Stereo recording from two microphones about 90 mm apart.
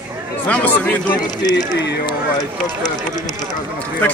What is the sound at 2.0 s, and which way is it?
Speech, 45° left (ahead or behind).